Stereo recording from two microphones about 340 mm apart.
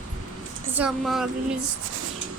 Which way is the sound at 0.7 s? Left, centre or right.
Centre.